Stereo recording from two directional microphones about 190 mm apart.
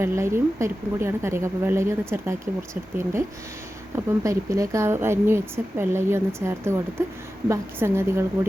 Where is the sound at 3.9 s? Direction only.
15° right (ahead or behind).